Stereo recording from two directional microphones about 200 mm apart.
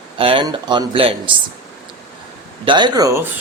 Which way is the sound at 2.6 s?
20° right (ahead or behind).